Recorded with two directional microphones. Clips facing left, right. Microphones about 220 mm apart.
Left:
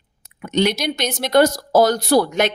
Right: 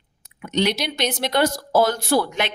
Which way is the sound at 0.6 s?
45° left (ahead or behind).